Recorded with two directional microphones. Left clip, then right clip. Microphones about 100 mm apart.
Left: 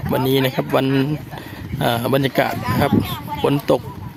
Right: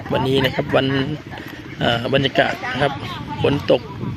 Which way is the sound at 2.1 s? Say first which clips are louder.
Right 1 dB; 75° left (ahead or behind).